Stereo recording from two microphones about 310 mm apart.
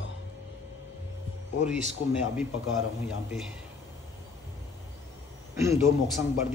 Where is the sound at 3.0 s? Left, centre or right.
Centre.